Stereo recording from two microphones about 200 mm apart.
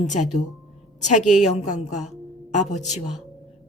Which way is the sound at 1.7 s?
35° left (ahead or behind).